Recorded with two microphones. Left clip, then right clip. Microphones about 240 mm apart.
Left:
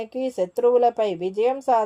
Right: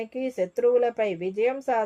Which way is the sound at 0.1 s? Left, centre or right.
Left.